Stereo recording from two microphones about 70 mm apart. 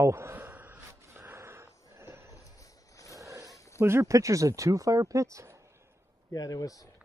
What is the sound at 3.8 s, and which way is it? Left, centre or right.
Speech, right.